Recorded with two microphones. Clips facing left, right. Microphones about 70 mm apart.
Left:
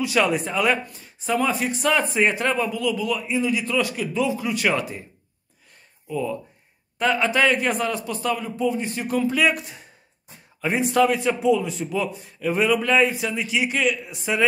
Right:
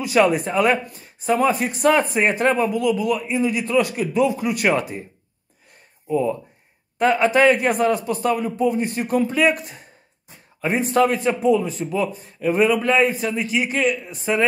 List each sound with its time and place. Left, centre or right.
0.0 s a man's voice: centre
1.9 s speech: right
2.9 s a man's voice: centre
6.0 s speech: right
7.0 s a man's voice: centre
8.5 s speech: right
8.7 s a man's voice: centre